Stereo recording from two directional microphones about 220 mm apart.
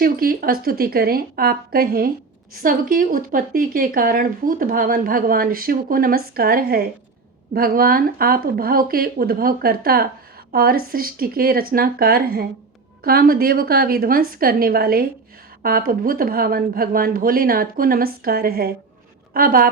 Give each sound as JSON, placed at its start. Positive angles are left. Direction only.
{"t": 0.0, "sound": "a woman's voice", "side_deg": -40}